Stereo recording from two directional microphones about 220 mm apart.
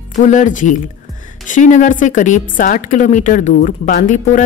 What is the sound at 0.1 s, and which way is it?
A woman's voice, 35° left (ahead or behind).